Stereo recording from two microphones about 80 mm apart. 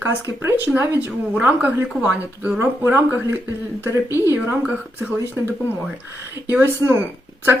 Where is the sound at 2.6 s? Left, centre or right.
Right.